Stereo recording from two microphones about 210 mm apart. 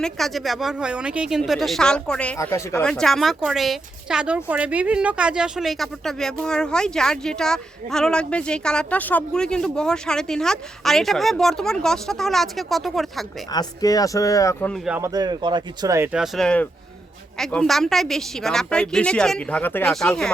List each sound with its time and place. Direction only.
0.0 s speech: centre (ahead or behind)
13.5 s speech: 20° left (ahead or behind)
14.7 s speech: 5° right (ahead or behind)
15.1 s speech: 20° right (ahead or behind)
16.1 s speech: centre (ahead or behind)